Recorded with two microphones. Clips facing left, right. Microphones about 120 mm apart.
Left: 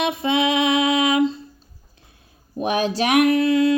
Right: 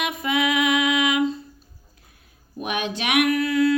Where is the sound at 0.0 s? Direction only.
30° left (ahead or behind).